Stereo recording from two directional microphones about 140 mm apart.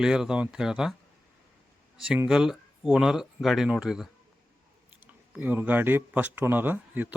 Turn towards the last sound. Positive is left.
turn(degrees=-10)  # may be behind; listen again after turning